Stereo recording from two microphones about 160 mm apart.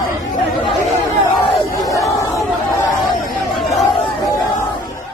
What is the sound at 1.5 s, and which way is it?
Crowd, 20° left (ahead or behind).